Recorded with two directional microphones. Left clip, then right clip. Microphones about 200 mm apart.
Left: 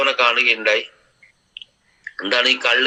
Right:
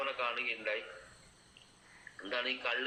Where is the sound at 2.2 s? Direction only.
55° left (ahead or behind).